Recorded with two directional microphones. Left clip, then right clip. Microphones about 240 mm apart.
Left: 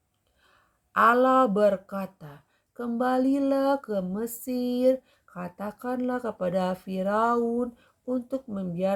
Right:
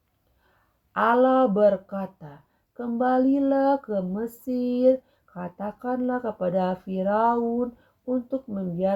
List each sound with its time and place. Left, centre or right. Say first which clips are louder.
0.9 s speech: even; left